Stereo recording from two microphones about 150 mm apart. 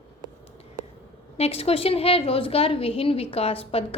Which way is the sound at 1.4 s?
45° left (ahead or behind).